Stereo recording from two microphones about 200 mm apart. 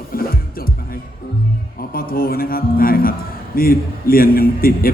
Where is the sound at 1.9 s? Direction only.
45° left (ahead or behind).